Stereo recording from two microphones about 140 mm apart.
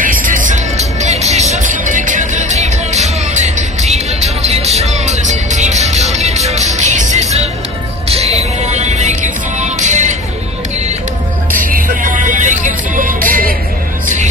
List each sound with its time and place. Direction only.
0.0 s music: 75° right (ahead or behind)
1.0 s music: 50° right (ahead or behind)
8.1 s music: 50° right (ahead or behind)
11.6 s music: 75° right (ahead or behind)
13.3 s music: 90° right